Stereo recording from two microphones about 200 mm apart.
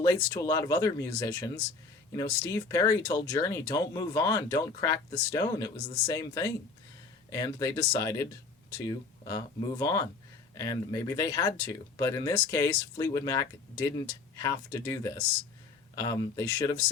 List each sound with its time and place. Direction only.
0.0 s speech: 15° left (ahead or behind)